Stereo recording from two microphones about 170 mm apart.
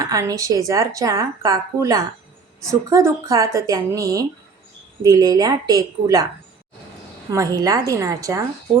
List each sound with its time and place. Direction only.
0.0 s a woman's voice: 20° right (ahead or behind)
7.3 s a woman's voice: 20° right (ahead or behind)